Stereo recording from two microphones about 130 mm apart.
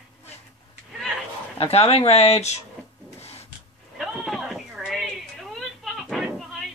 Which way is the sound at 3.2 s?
50° left (ahead or behind).